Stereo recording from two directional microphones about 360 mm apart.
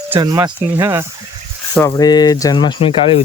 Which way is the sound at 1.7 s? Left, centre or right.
Centre.